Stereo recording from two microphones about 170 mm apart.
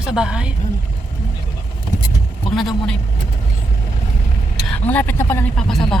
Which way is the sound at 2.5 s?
Centre (ahead or behind).